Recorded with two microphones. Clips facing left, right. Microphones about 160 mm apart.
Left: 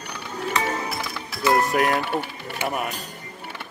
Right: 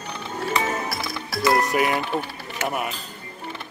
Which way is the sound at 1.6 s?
Centre (ahead or behind).